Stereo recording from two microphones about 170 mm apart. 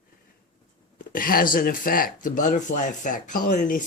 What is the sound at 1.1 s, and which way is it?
Speech, 55° left (ahead or behind).